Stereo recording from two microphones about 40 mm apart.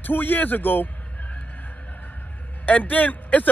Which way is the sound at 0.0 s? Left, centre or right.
Left.